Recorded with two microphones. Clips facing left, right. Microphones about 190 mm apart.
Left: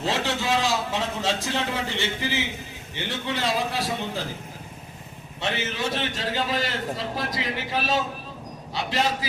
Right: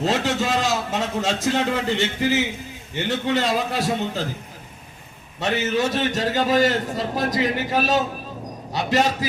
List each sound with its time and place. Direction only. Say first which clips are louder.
0.0 s a man's voice: right 4 dB; 45° right (ahead or behind)
5.4 s a man's voice: right 7 dB; 45° right (ahead or behind)